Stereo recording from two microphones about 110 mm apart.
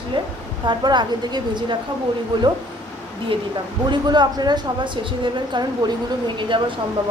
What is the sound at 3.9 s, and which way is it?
Speech, 40° right (ahead or behind).